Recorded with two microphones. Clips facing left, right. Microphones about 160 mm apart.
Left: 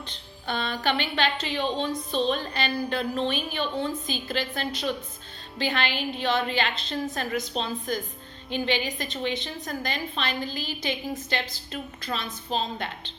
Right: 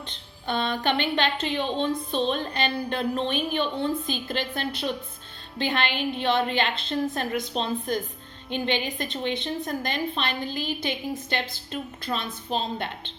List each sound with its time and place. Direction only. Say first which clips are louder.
0.4 s a woman's voice: right 2 dB; 50° right (ahead or behind)